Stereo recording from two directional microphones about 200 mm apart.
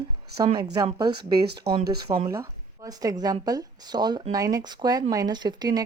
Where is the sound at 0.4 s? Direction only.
25° right (ahead or behind).